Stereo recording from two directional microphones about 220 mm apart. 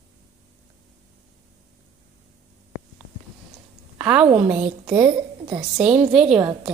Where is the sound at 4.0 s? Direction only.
5° right (ahead or behind).